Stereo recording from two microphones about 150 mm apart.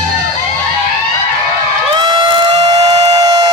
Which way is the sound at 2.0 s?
30° right (ahead or behind).